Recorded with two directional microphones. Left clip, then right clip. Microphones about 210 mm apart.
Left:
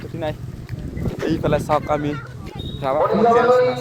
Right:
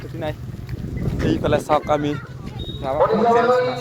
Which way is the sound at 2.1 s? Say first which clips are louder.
Left 1 dB; 45° left (ahead or behind).